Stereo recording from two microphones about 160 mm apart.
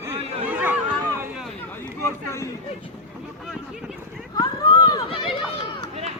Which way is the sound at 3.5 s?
Centre (ahead or behind).